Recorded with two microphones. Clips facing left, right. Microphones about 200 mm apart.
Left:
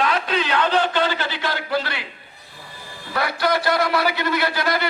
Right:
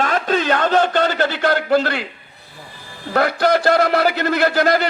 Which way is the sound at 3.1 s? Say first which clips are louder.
Right 6 dB; 50° right (ahead or behind).